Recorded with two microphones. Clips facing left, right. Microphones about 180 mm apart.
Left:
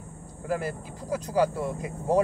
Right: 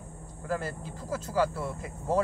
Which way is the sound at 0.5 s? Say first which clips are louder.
Left 3 dB; 15° left (ahead or behind).